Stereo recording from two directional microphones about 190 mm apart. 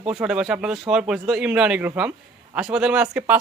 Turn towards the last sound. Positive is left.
turn(degrees=-10)  # may be behind; listen again after turning